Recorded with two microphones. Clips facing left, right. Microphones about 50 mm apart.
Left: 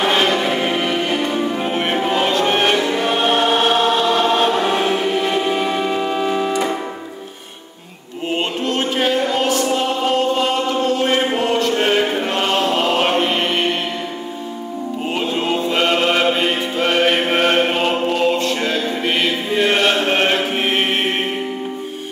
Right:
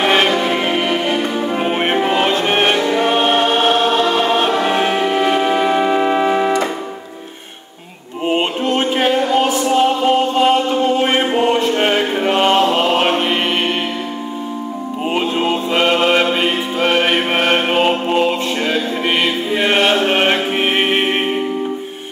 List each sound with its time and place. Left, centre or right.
0.0 s change ringing: right
0.6 s music: centre
0.9 s music: centre
1.5 s music: right
3.0 s choir: right
4.7 s music: right
8.3 s music: right
9.3 s chant: centre
12.3 s chant: right; by 13.7 s centre
15.0 s music: centre
20.0 s chant: centre